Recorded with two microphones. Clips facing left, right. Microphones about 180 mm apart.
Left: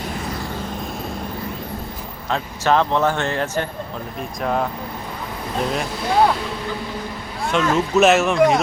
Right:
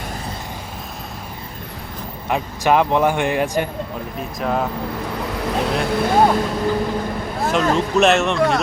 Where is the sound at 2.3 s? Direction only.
15° right (ahead or behind).